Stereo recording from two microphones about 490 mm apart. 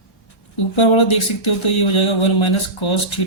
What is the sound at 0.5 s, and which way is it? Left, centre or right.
Speech, left.